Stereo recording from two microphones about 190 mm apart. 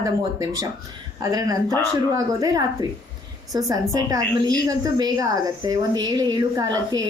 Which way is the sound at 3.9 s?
20° right (ahead or behind).